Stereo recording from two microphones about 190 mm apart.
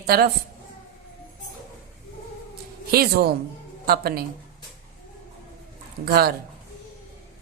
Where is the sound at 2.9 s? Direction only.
55° right (ahead or behind).